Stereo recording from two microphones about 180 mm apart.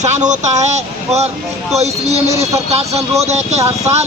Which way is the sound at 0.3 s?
40° right (ahead or behind).